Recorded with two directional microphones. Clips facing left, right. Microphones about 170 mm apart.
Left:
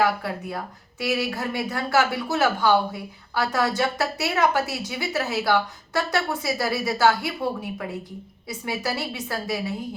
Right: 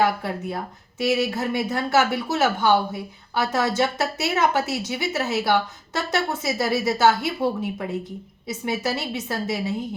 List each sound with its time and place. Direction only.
0.0 s speech: 25° right (ahead or behind)